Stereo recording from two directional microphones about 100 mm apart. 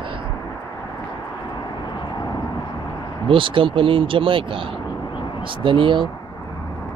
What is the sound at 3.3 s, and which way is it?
Speech, 60° right (ahead or behind).